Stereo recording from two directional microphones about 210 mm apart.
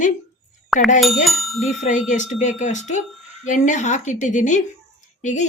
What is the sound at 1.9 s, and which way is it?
A woman's voice, 35° left (ahead or behind).